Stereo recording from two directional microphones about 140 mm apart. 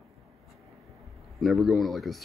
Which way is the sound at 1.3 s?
Centre (ahead or behind).